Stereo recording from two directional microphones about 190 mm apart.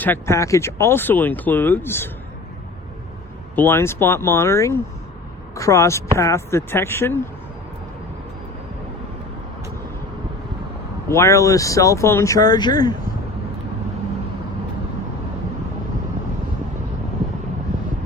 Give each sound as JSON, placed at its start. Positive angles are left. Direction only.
{"t": 0.0, "sound": "speech", "side_deg": 10}
{"t": 3.5, "sound": "speech", "side_deg": 10}
{"t": 11.1, "sound": "speech", "side_deg": 15}